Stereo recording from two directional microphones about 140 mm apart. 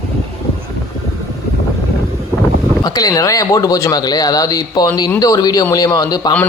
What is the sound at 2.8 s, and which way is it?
A man's voice, 30° left (ahead or behind).